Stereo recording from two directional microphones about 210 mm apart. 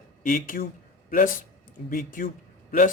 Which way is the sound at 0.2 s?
40° left (ahead or behind).